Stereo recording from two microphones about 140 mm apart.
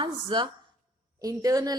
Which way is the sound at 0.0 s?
35° right (ahead or behind).